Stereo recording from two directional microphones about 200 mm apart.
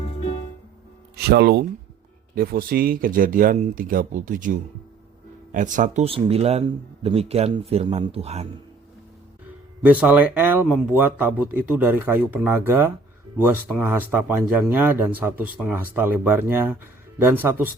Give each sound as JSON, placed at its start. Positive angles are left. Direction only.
{"t": 1.1, "sound": "speech", "side_deg": -55}
{"t": 9.8, "sound": "speech", "side_deg": -5}